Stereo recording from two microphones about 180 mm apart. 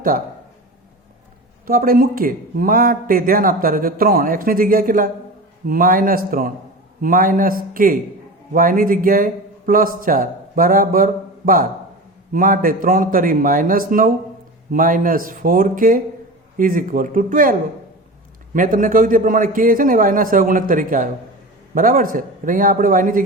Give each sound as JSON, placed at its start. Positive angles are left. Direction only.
{"t": 1.6, "sound": "a man's voice", "side_deg": -55}
{"t": 18.5, "sound": "speech", "side_deg": -50}